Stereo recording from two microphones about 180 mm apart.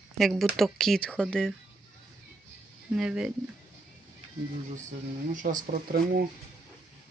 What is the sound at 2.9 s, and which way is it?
Speech, 5° right (ahead or behind).